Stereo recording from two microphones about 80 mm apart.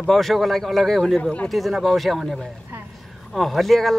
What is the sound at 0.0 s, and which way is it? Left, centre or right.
Speech, centre.